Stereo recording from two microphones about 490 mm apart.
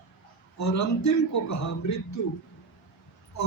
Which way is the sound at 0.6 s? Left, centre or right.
Left.